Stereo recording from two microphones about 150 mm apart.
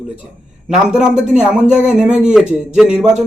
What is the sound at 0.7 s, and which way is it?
A man's voice, 5° right (ahead or behind).